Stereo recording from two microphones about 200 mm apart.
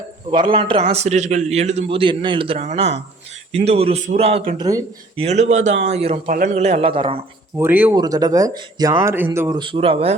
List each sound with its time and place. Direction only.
0.3 s a man's voice: 25° right (ahead or behind)
5.2 s a man's voice: 35° right (ahead or behind)
6.2 s a man's voice: 40° right (ahead or behind); by 7.2 s 25° right (ahead or behind)
7.5 s speech: 10° right (ahead or behind)
7.9 s speech: 20° right (ahead or behind)
9.6 s a man's voice: 25° right (ahead or behind)